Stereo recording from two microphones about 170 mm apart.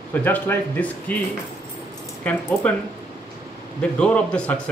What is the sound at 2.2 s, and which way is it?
Speech, 10° left (ahead or behind).